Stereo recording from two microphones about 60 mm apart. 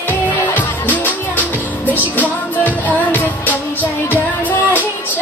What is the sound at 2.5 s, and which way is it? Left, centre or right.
Music, left.